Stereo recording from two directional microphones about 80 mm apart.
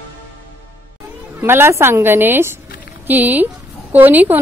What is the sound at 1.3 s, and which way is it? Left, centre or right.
Speech, right.